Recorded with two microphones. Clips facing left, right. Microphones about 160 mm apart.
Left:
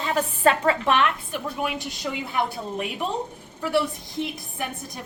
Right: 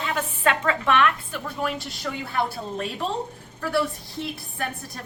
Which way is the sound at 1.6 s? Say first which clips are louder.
Right 2 dB; 15° left (ahead or behind).